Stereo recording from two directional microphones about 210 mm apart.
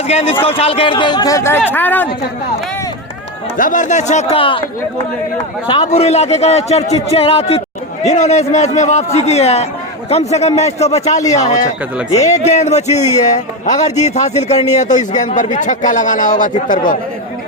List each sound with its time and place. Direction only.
0.1 s a man's voice: 30° left (ahead or behind); by 2.0 s 10° left (ahead or behind)
3.6 s speech: 40° left (ahead or behind)
5.6 s a man's voice: 20° left (ahead or behind)
12.3 s speech: 35° left (ahead or behind)